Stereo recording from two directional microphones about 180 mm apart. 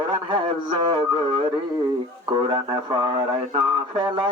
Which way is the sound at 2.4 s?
25° right (ahead or behind).